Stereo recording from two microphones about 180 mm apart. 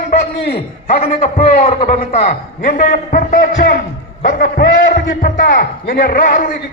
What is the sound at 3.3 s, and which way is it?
A man's voice, 60° left (ahead or behind).